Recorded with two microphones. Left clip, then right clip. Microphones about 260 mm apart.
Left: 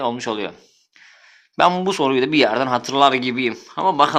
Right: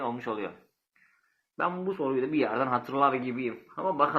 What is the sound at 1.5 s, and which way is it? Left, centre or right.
A man's voice, left.